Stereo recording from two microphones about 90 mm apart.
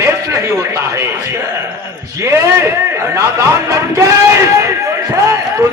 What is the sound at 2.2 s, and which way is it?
A man's voice, 30° right (ahead or behind).